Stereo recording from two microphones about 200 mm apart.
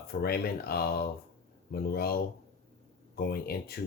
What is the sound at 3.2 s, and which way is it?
Speech, 50° left (ahead or behind).